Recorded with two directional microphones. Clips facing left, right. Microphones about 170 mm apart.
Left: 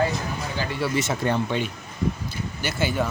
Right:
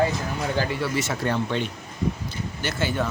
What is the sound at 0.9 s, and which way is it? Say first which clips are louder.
Speech: left 4 dB; 20° left (ahead or behind).